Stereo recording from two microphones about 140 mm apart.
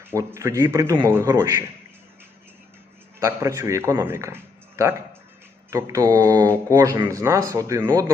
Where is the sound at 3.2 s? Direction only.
20° right (ahead or behind).